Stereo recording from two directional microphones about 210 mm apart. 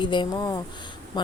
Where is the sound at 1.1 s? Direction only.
20° left (ahead or behind).